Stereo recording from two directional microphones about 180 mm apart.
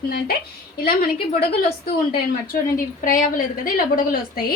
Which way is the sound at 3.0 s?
50° left (ahead or behind).